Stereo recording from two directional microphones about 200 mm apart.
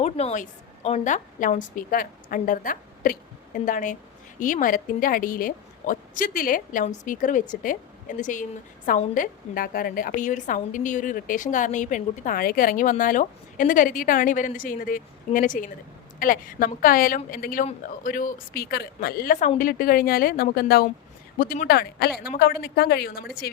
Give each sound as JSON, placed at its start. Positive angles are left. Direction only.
{"t": 0.0, "sound": "a woman's voice", "side_deg": 30}